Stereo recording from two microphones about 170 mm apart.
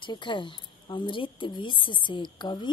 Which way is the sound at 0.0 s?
30° left (ahead or behind).